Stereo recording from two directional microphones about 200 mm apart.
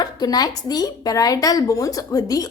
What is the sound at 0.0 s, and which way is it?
A woman's voice, 20° left (ahead or behind).